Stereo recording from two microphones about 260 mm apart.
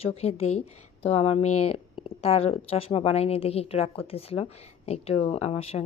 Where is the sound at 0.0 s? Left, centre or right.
Left.